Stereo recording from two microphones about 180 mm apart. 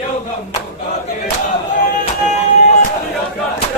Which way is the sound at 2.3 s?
40° left (ahead or behind).